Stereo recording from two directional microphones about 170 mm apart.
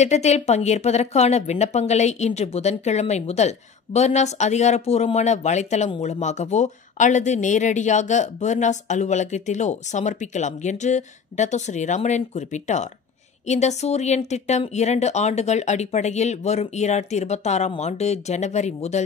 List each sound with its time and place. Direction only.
0.0 s speech: 40° left (ahead or behind)